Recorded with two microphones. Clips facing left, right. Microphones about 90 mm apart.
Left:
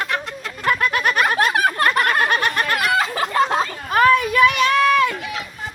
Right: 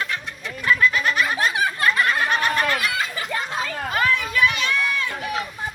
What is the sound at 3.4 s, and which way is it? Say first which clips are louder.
Chatter: left 11 dB; 90° left.